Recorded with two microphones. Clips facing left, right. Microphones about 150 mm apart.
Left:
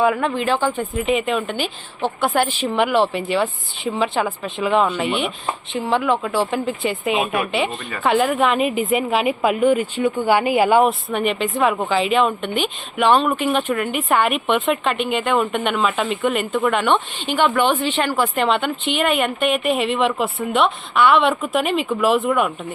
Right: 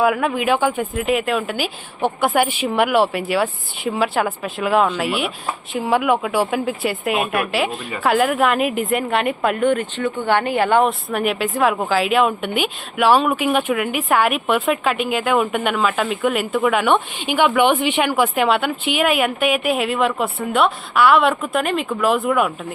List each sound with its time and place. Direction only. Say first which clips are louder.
0.0 s speech: right 1 dB; 5° right (ahead or behind)